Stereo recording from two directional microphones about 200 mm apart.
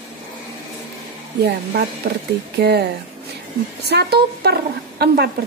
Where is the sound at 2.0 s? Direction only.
50° right (ahead or behind).